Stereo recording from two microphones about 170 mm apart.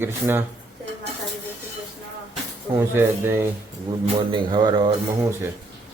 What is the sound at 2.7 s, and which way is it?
Speech, 15° right (ahead or behind).